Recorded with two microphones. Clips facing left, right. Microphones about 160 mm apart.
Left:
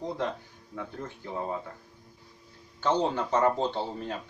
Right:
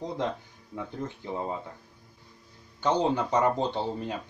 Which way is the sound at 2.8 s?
15° right (ahead or behind).